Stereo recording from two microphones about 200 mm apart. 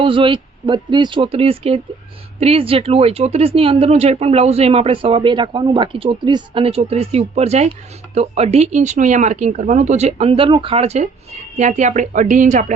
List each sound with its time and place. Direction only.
0.0 s speech: 25° right (ahead or behind)